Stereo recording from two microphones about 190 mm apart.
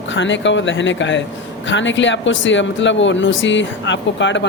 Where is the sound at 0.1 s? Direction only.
75° left (ahead or behind).